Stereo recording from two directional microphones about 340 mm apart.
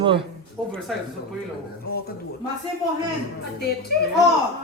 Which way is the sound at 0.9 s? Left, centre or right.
Centre.